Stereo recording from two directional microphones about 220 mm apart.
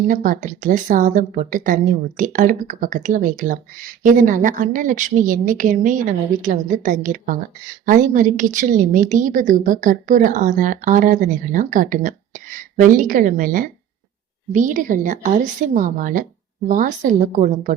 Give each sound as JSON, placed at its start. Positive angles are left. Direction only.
{"t": 0.1, "sound": "a woman's voice", "side_deg": -35}